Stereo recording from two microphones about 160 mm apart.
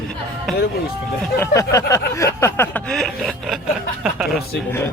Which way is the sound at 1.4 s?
20° left (ahead or behind).